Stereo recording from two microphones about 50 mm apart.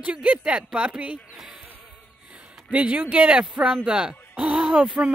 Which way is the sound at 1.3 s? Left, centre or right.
Centre.